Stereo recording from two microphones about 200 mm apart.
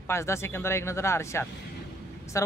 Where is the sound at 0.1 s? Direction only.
15° left (ahead or behind).